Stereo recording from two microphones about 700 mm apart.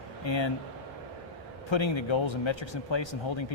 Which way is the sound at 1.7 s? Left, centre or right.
Left.